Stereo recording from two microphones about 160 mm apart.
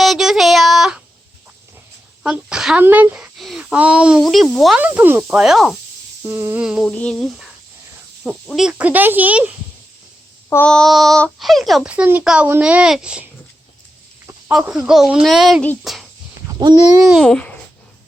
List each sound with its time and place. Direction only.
0.0 s child singing: centre (ahead or behind)
2.2 s a child's voice: 5° right (ahead or behind)
6.2 s speech: 15° right (ahead or behind)
6.8 s a child's voice: 5° left (ahead or behind); by 9.5 s 10° right (ahead or behind)
10.5 s a child's voice: 10° left (ahead or behind)
14.5 s a child's voice: 5° right (ahead or behind)
16.6 s speech: 25° right (ahead or behind)
17.1 s a child's voice: 5° left (ahead or behind)